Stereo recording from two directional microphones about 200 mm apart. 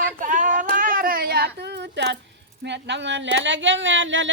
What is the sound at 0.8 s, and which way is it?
Child singing, 45° right (ahead or behind).